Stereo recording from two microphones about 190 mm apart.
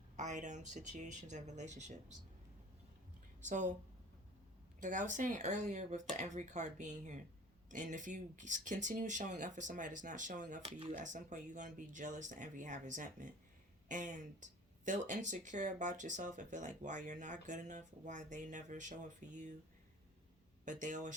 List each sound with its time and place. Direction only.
0.2 s speech: 40° right (ahead or behind)
3.4 s speech: 40° right (ahead or behind)
4.8 s speech: 40° right (ahead or behind)
20.7 s speech: 40° right (ahead or behind)